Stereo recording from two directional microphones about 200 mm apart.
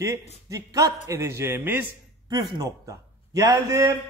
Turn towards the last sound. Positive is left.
turn(degrees=-15)  # may be behind; listen again after turning